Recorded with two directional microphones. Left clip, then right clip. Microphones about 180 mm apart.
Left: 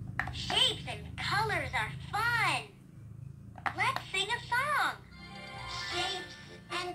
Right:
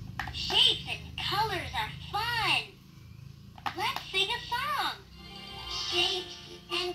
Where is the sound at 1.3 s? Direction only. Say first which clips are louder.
Even; 10° left (ahead or behind).